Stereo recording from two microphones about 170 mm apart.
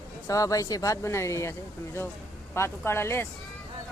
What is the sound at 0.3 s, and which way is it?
Speech, 20° left (ahead or behind).